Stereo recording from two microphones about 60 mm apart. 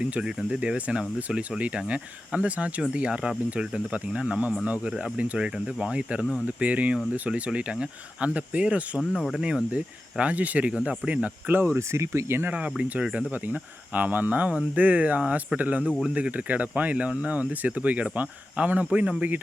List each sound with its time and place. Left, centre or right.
0.0 s speech: centre
9.0 s speech: centre
9.3 s speech: centre
9.7 s speech: right
11.8 s speech: right
12.5 s speech: centre
13.3 s speech: right